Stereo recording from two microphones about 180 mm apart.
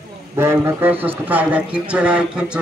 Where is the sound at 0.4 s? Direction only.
15° right (ahead or behind).